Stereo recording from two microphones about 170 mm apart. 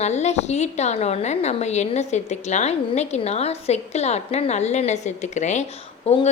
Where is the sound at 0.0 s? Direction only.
40° left (ahead or behind).